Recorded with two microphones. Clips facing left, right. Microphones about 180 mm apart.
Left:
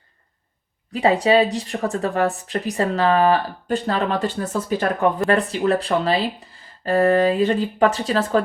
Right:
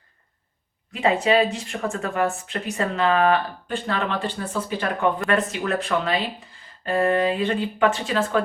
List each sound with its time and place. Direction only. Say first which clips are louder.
0.9 s speech: left 3 dB; 35° left (ahead or behind)